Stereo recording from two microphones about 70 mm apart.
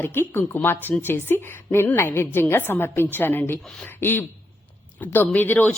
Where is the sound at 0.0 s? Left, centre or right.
Left.